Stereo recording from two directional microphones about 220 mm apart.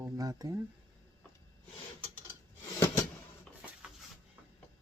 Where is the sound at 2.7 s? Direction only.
10° left (ahead or behind).